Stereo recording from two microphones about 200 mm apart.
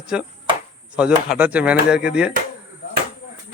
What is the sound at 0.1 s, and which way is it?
Speech, 5° right (ahead or behind).